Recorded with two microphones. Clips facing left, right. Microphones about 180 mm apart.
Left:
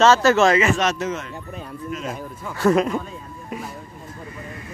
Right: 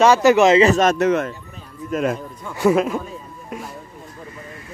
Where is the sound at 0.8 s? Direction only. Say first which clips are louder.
Right 7 dB; 60° right (ahead or behind).